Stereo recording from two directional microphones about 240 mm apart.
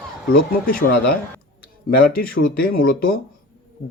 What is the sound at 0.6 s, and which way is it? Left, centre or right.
Speech, left.